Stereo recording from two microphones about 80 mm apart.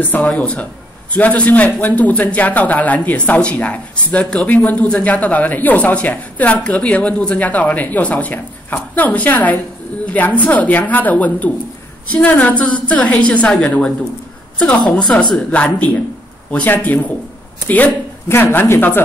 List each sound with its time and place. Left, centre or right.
0.0 s a man's voice: left